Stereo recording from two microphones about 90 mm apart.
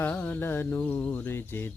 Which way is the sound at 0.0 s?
15° left (ahead or behind).